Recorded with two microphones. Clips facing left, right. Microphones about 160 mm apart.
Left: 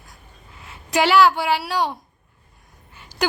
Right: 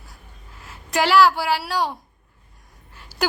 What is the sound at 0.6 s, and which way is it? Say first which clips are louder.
A woman's voice: left 2 dB; centre (ahead or behind).